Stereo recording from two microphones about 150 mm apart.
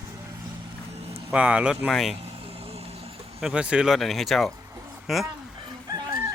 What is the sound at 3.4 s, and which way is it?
Speech, 5° right (ahead or behind).